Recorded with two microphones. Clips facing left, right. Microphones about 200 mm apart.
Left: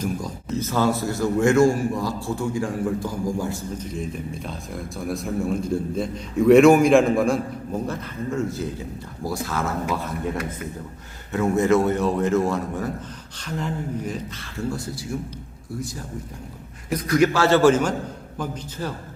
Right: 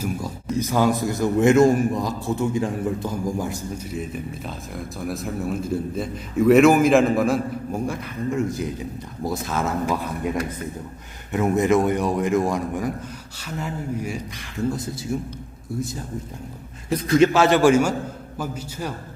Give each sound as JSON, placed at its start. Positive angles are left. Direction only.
{"t": 0.0, "sound": "a man's voice", "side_deg": -10}
{"t": 11.3, "sound": "a man's voice", "side_deg": -15}
{"t": 16.9, "sound": "a man's voice", "side_deg": -25}